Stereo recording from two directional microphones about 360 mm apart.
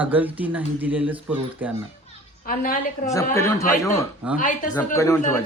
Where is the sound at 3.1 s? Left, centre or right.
Centre.